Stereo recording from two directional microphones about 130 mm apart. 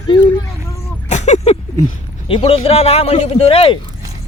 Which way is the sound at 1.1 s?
65° left (ahead or behind).